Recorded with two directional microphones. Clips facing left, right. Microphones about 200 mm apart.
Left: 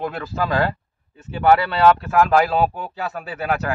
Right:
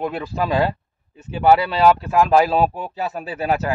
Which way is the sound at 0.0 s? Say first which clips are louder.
Right 1 dB; 15° right (ahead or behind).